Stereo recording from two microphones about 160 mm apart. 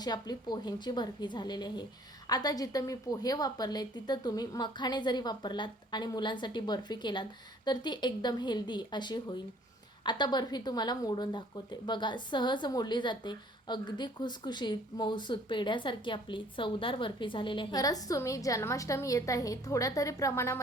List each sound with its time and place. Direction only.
0.0 s speech: 25° left (ahead or behind)